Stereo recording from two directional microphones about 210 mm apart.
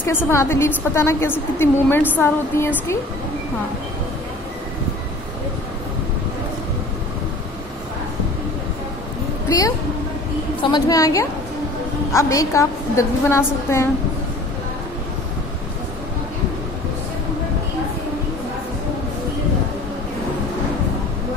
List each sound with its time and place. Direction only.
0.0 s a woman's voice: 10° left (ahead or behind)
10.6 s a woman's voice: 20° left (ahead or behind)